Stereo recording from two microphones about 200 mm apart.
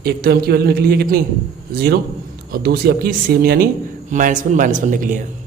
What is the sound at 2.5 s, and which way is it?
A man's voice, 50° right (ahead or behind).